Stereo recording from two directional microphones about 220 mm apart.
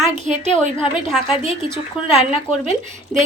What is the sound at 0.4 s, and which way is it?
Speech, 25° left (ahead or behind).